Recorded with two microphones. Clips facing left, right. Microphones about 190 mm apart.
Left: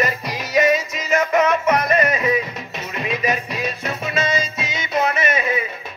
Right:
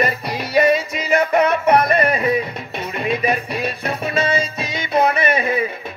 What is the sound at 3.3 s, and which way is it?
Music, 60° right (ahead or behind).